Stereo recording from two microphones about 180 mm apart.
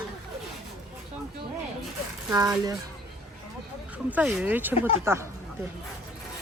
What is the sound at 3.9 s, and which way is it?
Speech, 5° right (ahead or behind).